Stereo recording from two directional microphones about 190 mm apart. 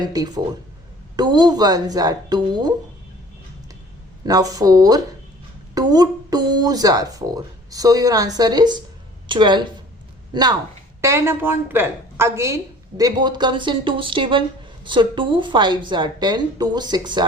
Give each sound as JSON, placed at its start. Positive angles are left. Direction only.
{"t": 0.0, "sound": "speech", "side_deg": -20}
{"t": 4.3, "sound": "speech", "side_deg": -20}
{"t": 11.0, "sound": "a woman's voice", "side_deg": -15}